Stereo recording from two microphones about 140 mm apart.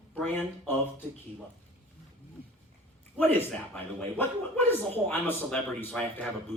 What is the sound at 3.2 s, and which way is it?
Speech, 15° left (ahead or behind).